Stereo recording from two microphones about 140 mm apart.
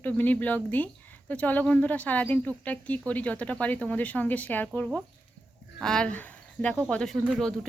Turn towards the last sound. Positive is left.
turn(degrees=5)  # may be behind; listen again after turning